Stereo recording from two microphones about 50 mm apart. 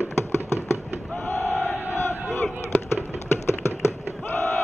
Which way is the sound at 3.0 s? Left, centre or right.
Left.